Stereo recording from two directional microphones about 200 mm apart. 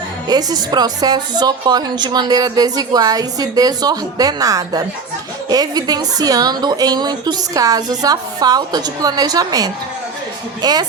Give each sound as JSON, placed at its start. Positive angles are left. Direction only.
{"t": 0.3, "sound": "a woman's voice", "side_deg": -20}